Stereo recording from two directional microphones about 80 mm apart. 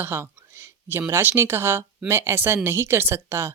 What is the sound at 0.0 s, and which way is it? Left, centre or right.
Speech, right.